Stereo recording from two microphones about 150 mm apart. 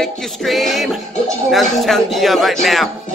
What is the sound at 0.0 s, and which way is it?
Speech, centre (ahead or behind).